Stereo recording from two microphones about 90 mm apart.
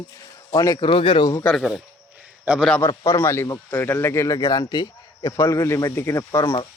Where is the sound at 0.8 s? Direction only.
80° left.